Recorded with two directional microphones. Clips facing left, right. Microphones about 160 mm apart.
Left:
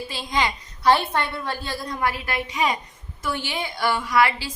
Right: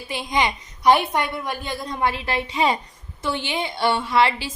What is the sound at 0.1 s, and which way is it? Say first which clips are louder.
A woman's voice: right 4 dB; 20° right (ahead or behind).